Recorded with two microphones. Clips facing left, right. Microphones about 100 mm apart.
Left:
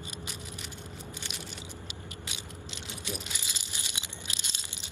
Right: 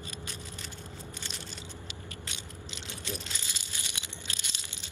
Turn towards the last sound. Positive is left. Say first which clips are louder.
# left 1 dB
turn(degrees=20)  # may be behind; listen again after turning